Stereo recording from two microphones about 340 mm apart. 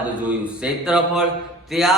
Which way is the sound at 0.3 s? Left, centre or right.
Centre.